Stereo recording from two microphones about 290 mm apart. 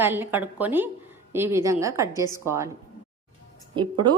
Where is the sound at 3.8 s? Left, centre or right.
Centre.